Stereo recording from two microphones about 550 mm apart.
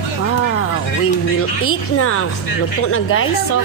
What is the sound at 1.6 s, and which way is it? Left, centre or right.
A woman's voice, left.